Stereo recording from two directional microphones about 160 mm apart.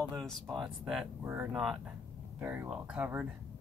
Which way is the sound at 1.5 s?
Centre (ahead or behind).